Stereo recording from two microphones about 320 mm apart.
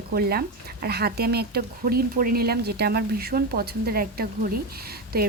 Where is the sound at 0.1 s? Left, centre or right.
Right.